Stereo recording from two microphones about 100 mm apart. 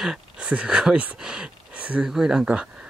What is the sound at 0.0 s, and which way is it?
Speech, 10° right (ahead or behind).